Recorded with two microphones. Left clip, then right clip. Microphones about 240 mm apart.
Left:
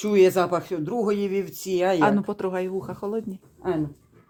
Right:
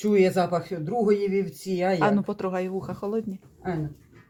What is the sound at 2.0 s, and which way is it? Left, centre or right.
Speech, centre.